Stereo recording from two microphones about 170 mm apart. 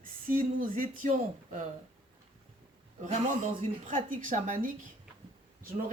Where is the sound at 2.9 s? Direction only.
45° right (ahead or behind).